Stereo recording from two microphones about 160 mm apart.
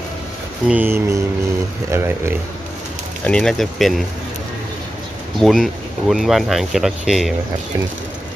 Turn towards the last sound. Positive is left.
turn(degrees=0)  # may be behind; listen again after turning